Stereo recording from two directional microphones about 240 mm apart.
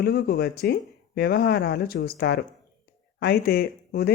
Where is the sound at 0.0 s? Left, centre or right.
Left.